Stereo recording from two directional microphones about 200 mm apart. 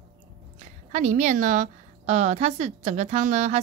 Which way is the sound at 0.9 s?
35° right (ahead or behind).